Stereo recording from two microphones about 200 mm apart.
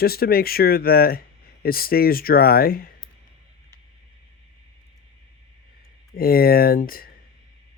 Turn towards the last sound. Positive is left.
turn(degrees=45)  # may be behind; listen again after turning